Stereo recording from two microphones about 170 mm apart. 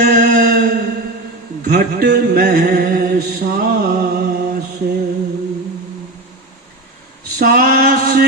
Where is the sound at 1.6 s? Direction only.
65° right (ahead or behind).